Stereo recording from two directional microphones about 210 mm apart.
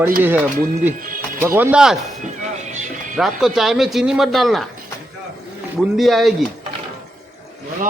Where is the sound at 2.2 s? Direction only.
35° right (ahead or behind).